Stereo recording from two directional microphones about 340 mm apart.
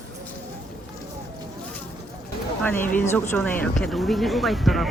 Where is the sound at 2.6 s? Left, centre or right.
Centre.